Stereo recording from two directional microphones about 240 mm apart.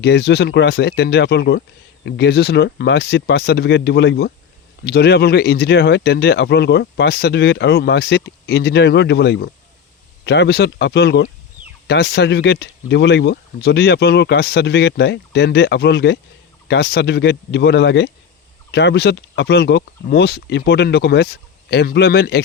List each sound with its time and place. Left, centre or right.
0.0 s speech: left